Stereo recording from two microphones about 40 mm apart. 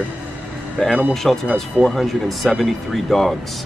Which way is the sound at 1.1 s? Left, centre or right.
Centre.